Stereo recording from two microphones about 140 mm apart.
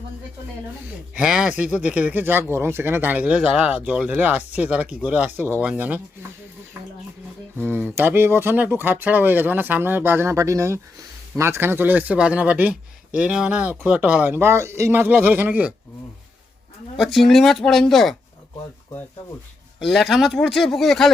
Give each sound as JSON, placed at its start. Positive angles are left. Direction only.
{"t": 1.1, "sound": "speech", "side_deg": -5}
{"t": 7.7, "sound": "speech", "side_deg": -15}
{"t": 17.0, "sound": "speech", "side_deg": 0}
{"t": 19.8, "sound": "speech", "side_deg": 0}